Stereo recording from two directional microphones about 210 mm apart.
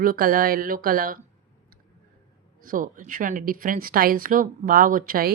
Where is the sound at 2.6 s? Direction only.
40° right (ahead or behind).